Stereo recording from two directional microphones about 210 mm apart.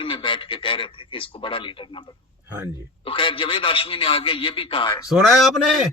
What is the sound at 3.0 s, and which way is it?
A man's voice, 25° left (ahead or behind).